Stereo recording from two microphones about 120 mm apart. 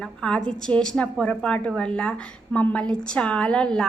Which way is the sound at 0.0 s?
5° left (ahead or behind).